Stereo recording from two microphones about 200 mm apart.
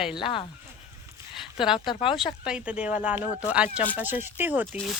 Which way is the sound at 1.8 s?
25° left (ahead or behind).